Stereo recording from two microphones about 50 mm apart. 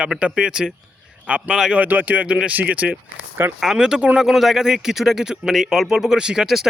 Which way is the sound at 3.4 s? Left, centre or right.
Right.